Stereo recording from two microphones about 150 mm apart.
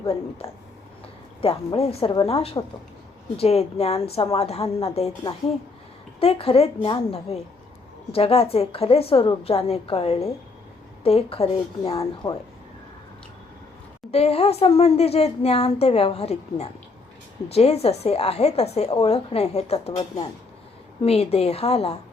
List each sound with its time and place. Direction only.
0.4 s a woman's voice: 40° left (ahead or behind)
14.1 s speech: 40° left (ahead or behind)